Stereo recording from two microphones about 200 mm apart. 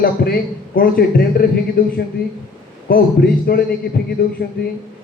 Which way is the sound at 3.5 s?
50° left (ahead or behind).